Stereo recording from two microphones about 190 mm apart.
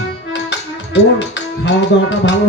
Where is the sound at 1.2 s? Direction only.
70° left (ahead or behind).